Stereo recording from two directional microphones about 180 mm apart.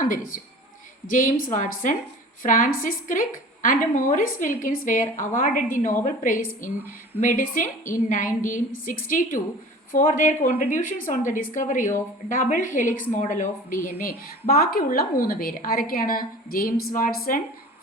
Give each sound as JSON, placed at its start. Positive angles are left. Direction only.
{"t": 0.0, "sound": "a woman's voice", "side_deg": 50}